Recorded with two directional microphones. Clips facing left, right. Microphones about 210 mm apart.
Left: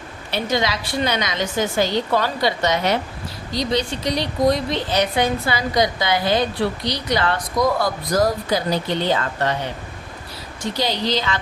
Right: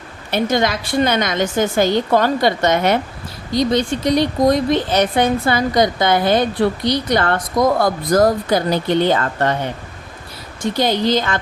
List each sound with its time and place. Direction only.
0.3 s a woman's voice: 50° right (ahead or behind)
10.8 s a woman's voice: 50° right (ahead or behind)